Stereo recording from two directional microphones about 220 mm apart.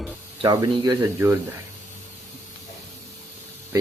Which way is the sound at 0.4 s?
20° right (ahead or behind).